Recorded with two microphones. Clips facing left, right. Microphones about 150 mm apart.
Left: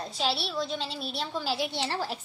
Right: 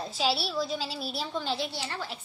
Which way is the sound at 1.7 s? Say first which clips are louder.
Left 5 dB; 30° left (ahead or behind).